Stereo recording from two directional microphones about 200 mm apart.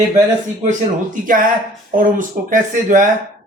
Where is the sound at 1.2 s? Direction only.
45° right (ahead or behind).